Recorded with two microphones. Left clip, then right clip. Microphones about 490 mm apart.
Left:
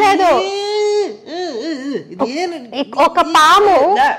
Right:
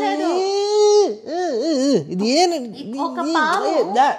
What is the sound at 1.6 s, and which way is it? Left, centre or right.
Speech, right.